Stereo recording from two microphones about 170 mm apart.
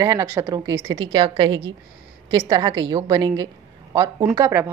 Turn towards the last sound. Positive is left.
turn(degrees=-15)  # may be behind; listen again after turning